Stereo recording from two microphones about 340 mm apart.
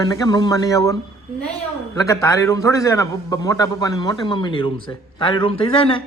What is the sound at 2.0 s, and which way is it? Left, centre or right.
Speech, centre.